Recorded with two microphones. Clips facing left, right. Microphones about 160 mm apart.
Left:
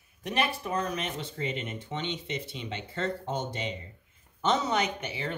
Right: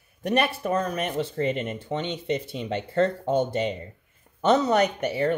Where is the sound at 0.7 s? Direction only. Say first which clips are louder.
Right 6 dB; 50° right (ahead or behind).